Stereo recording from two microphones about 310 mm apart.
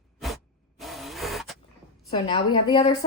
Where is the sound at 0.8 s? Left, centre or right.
Centre.